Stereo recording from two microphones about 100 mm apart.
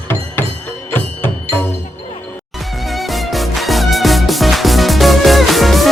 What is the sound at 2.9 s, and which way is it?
Music, centre (ahead or behind).